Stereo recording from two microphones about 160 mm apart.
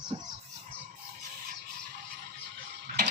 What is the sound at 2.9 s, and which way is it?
Tick-tock, 70° right (ahead or behind).